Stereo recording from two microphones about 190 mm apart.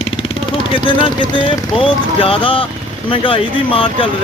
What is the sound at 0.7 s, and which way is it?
Speech, 25° left (ahead or behind).